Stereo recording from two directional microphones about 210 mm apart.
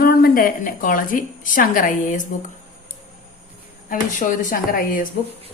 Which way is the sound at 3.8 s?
40° left (ahead or behind).